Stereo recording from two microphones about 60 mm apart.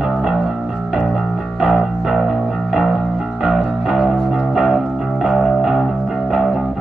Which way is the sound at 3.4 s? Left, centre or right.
Centre.